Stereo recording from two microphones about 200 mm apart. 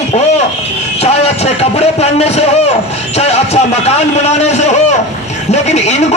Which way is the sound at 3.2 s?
30° left (ahead or behind).